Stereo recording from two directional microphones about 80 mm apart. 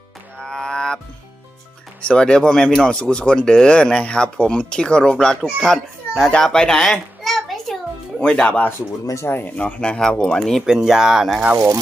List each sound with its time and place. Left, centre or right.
0.3 s music: centre
2.0 s speech: centre
5.5 s children playing: centre
8.2 s speech: centre
9.0 s speech: left
9.6 s speech: centre
10.7 s speech: centre
11.3 s speech: centre